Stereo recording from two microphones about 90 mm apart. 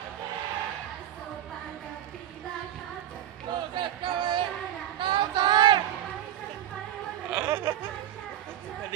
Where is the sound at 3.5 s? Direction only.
60° right (ahead or behind).